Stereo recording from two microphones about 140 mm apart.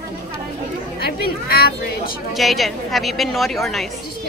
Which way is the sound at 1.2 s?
90° left.